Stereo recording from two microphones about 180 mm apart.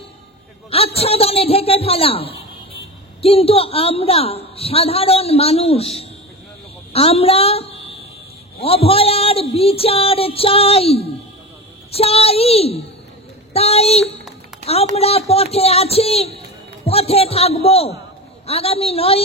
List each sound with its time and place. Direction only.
0.7 s a woman's voice: 35° left (ahead or behind)
8.6 s a woman's voice: 30° left (ahead or behind)